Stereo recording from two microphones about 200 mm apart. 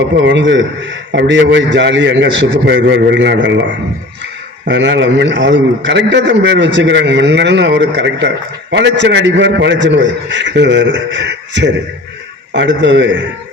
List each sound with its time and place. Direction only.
0.3 s a man's voice: 65° right (ahead or behind)
4.7 s a man's voice: 65° right (ahead or behind)